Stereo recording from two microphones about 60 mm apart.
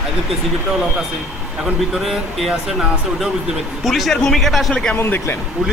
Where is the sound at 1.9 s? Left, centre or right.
Centre.